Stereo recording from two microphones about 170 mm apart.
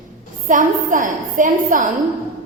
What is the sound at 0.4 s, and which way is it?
A woman's voice, 50° right (ahead or behind).